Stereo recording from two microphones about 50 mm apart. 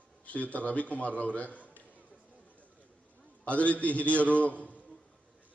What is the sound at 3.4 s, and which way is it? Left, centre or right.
A man's voice, left.